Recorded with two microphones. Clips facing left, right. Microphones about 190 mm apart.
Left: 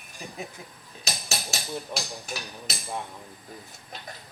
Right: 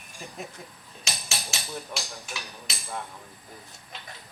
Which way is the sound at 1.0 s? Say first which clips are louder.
Left 2 dB; 40° left (ahead or behind).